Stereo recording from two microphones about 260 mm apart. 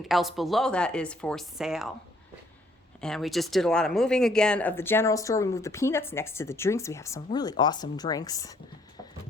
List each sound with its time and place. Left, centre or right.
0.1 s speech: centre
3.0 s speech: centre